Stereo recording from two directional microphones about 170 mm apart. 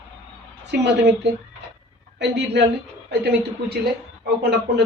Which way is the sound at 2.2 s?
90° right.